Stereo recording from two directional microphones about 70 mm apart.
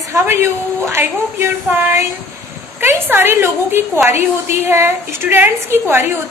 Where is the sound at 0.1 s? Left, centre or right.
Right.